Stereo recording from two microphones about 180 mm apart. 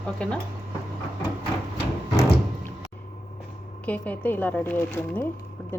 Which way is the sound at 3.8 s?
10° left (ahead or behind).